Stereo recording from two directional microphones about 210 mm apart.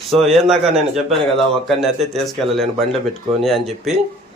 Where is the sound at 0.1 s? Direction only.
Centre (ahead or behind).